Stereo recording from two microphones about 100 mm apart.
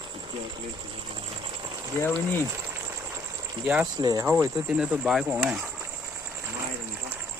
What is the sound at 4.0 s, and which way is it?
Speech, 40° right (ahead or behind).